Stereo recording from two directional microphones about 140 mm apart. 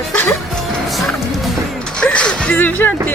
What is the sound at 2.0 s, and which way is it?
Speech, 5° left (ahead or behind).